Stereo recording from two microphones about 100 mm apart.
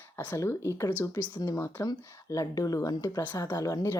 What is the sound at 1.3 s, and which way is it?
Speech, 40° left (ahead or behind).